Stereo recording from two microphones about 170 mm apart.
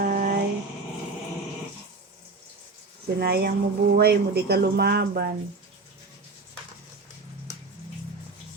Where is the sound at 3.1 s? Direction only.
70° right (ahead or behind).